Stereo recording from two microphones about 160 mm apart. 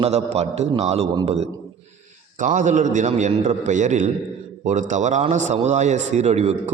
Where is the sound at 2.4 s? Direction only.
50° right (ahead or behind).